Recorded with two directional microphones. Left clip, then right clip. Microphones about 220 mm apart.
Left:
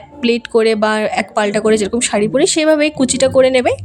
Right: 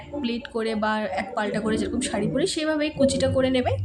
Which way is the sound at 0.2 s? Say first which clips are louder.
Left 15 dB; 40° left (ahead or behind).